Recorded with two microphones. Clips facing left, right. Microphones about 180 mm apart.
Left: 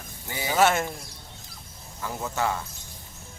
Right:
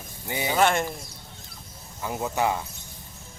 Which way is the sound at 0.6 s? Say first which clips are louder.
Left 1 dB; 5° left (ahead or behind).